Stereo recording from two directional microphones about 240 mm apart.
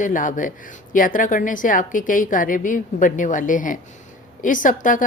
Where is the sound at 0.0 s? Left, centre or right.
Left.